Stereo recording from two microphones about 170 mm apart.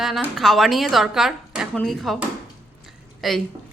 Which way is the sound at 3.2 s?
Centre (ahead or behind).